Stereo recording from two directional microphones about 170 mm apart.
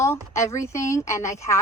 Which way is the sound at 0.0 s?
15° left (ahead or behind).